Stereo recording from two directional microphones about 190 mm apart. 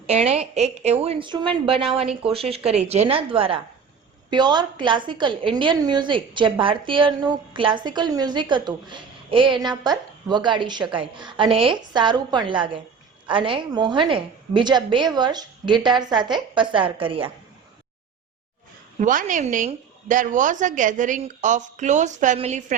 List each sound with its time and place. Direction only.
0.1 s a woman's voice: 35° right (ahead or behind)
18.9 s a woman's voice: 45° right (ahead or behind)